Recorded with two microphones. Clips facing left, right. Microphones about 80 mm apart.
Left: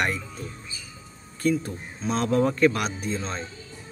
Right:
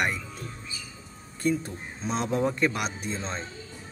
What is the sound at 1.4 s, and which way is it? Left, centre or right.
Speech, right.